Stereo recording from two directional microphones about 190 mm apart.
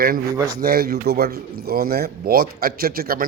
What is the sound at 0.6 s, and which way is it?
A man's voice, 55° right (ahead or behind).